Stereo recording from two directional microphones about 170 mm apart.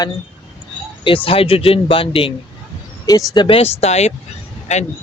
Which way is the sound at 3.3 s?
30° left (ahead or behind).